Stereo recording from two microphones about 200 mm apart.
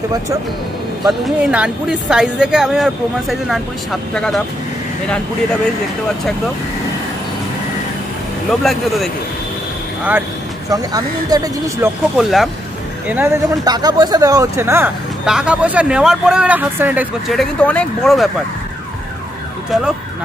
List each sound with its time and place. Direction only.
1.0 s speech: 5° right (ahead or behind)
8.5 s speech: centre (ahead or behind)
10.7 s speech: 20° right (ahead or behind)
12.2 s speech: centre (ahead or behind)
13.1 s speech: 15° right (ahead or behind); by 18.3 s centre (ahead or behind)